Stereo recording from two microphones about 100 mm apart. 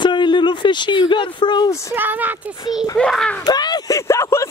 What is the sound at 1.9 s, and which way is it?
Speech, 20° right (ahead or behind).